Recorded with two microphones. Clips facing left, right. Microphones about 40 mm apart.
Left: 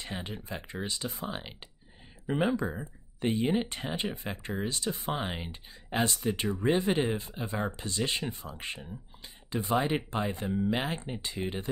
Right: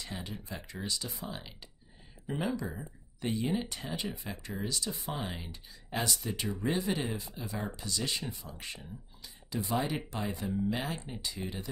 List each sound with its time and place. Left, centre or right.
0.0 s speech: left